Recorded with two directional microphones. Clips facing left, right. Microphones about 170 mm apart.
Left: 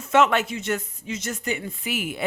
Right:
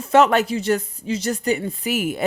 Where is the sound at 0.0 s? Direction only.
35° right (ahead or behind).